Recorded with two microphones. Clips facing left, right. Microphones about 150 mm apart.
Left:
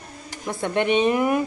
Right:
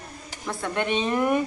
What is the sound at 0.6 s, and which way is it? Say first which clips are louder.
Speech: left 6 dB; 20° left (ahead or behind).